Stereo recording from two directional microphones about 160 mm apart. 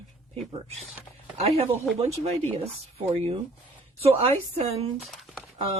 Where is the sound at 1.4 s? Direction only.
40° right (ahead or behind).